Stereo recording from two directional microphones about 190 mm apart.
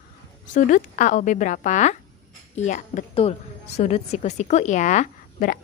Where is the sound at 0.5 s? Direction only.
45° left (ahead or behind).